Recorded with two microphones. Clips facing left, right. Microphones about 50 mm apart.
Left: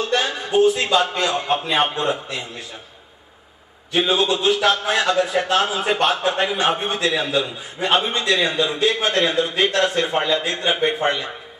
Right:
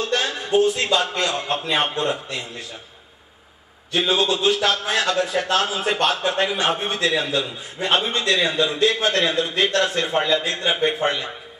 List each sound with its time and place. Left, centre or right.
0.0 s a man's voice: centre
4.0 s a man's voice: centre
10.2 s a man's voice: centre
10.7 s a man's voice: centre